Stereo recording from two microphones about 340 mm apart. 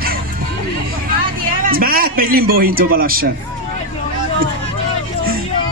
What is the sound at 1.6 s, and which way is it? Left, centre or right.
A man's voice, right.